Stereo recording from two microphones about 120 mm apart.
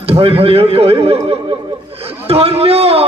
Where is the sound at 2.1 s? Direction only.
55° right (ahead or behind).